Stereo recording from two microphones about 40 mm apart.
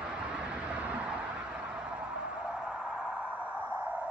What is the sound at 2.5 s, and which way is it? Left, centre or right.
Music, centre.